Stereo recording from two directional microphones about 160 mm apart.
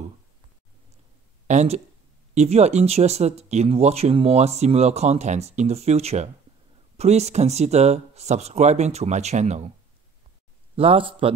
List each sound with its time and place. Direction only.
1.5 s speech: 45° right (ahead or behind)
10.8 s a man's voice: 35° right (ahead or behind)